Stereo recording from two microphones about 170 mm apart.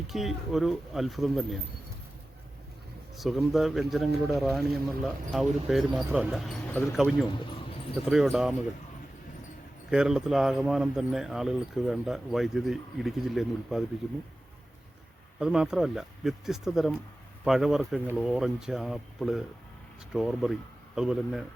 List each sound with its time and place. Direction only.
0.1 s speech: centre (ahead or behind)
3.2 s speech: centre (ahead or behind)
7.3 s a sound: 30° left (ahead or behind)
8.1 s speech: centre (ahead or behind)
9.9 s speech: 5° right (ahead or behind)
15.4 s speech: 5° right (ahead or behind)